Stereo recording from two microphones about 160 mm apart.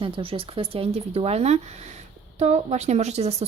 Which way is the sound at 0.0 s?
35° right (ahead or behind).